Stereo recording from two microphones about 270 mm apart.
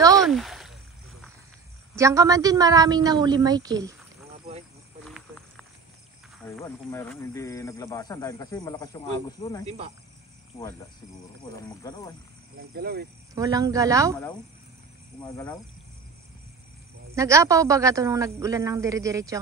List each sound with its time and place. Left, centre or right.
0.1 s a sound: centre
2.0 s a woman's voice: centre
5.0 s a sound: centre
6.6 s speech: centre
9.7 s speech: right
11.8 s speech: centre
12.7 s speech: right
13.3 s a woman's voice: centre
15.1 s speech: centre
17.1 s a woman's voice: centre